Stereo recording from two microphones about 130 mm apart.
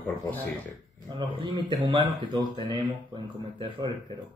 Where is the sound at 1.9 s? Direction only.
40° right (ahead or behind).